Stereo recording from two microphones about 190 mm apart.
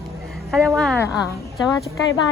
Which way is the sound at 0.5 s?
5° left (ahead or behind).